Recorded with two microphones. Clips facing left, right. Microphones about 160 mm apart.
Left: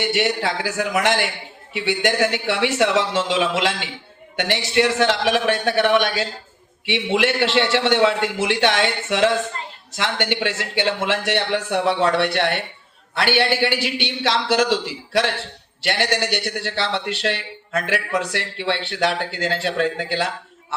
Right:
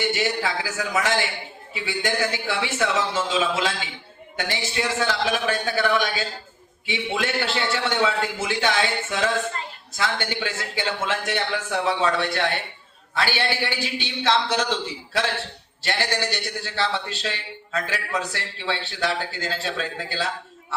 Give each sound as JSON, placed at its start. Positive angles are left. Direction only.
{"t": 0.0, "sound": "a man's voice", "side_deg": 65}
{"t": 15.8, "sound": "a man's voice", "side_deg": 75}